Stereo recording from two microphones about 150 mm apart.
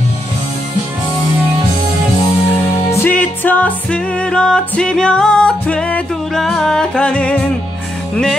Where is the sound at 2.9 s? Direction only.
15° left (ahead or behind).